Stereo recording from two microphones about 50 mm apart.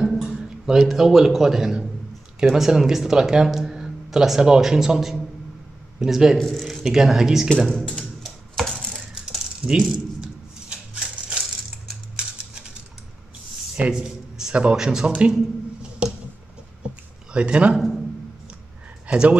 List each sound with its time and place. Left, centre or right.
0.2 s speech: centre
6.8 s speech: centre
7.7 s speech: centre
8.0 s typewriter: centre
9.1 s a sound: centre
9.6 s speech: centre
10.2 s a sound: centre
13.7 s a man's voice: centre
16.0 s a sound: right
17.3 s speech: right
17.7 s a man's voice: centre
19.1 s speech: right